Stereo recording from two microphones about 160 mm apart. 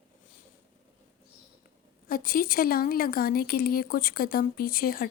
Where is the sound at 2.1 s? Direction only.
65° left (ahead or behind).